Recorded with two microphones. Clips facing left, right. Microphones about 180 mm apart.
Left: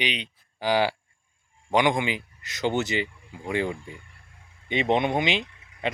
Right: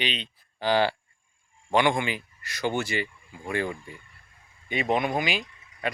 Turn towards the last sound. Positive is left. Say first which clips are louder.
# left 2 dB
turn(degrees=25)  # may be behind; listen again after turning